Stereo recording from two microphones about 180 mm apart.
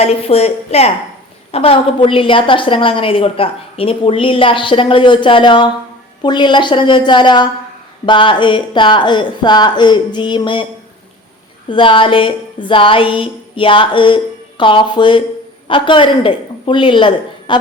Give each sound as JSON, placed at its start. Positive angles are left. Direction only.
{"t": 0.0, "sound": "a woman's voice", "side_deg": 35}
{"t": 11.7, "sound": "a woman's voice", "side_deg": 30}